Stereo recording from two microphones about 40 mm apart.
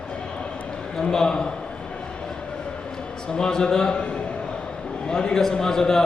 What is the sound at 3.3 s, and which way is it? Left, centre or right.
Speech, centre.